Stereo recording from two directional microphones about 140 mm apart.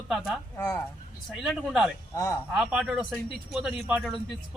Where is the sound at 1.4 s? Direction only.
5° right (ahead or behind).